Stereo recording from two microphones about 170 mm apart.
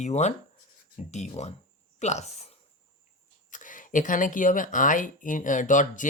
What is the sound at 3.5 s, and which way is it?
Speech, 50° left (ahead or behind).